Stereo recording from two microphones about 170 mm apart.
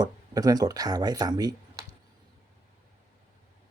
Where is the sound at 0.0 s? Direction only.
20° right (ahead or behind).